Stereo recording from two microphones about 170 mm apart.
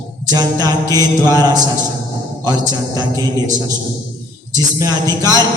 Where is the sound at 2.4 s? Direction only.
20° right (ahead or behind).